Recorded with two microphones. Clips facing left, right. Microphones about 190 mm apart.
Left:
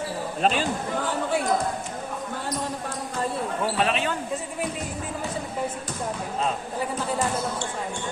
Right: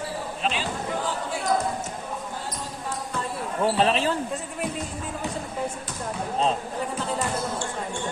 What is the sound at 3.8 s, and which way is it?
Speech, 30° right (ahead or behind).